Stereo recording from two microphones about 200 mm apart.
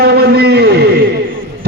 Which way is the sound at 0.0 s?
50° right (ahead or behind).